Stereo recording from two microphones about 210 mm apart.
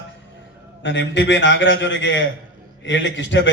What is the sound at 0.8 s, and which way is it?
A man's voice, 60° left (ahead or behind).